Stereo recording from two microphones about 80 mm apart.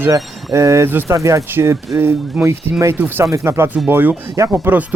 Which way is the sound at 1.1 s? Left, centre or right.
Right.